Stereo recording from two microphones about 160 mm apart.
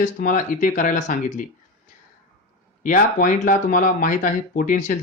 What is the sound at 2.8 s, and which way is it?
Speech, 60° left (ahead or behind).